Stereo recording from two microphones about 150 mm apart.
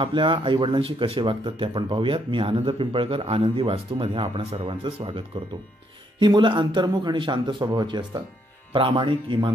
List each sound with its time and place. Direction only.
0.0 s speech: 35° right (ahead or behind)